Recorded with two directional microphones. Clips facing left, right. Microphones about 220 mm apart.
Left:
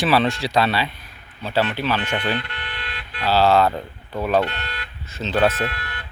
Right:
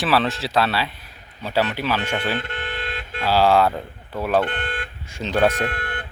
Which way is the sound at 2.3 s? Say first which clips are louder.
Even; 45° right (ahead or behind).